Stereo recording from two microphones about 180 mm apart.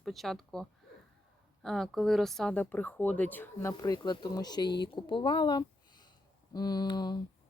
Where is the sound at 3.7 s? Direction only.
20° left (ahead or behind).